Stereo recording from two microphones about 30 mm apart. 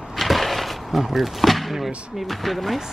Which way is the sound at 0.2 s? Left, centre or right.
Centre.